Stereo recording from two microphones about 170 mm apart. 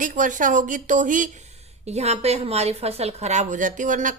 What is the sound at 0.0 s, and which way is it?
A woman's voice, 50° right (ahead or behind).